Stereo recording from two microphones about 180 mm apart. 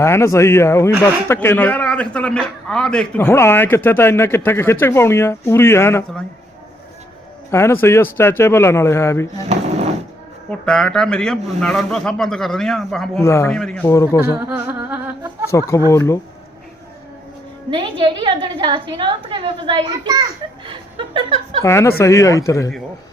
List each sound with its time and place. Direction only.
0.0 s a man's voice: 15° left (ahead or behind)
7.5 s a man's voice: 15° left (ahead or behind)
10.7 s a man's voice: 5° left (ahead or behind)
13.2 s a man's voice: 15° left (ahead or behind)
13.5 s a man's voice: 5° left (ahead or behind)
13.8 s a man's voice: 15° left (ahead or behind)
14.5 s music: 10° right (ahead or behind)
15.4 s a man's voice: 15° left (ahead or behind)
17.7 s a woman's voice: 25° right (ahead or behind)
21.6 s a man's voice: 15° left (ahead or behind)